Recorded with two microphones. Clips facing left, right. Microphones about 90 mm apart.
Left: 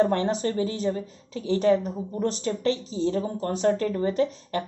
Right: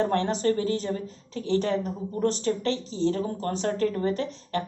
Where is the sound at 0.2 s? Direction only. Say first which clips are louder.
Even; 20° left (ahead or behind).